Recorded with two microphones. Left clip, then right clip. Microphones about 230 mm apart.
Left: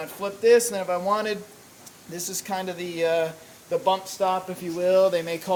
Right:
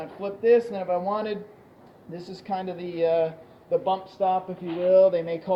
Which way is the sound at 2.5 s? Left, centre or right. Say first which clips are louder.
Right 1 dB; left.